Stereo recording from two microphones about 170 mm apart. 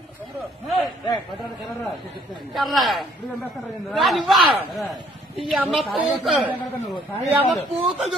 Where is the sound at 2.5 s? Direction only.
Centre (ahead or behind).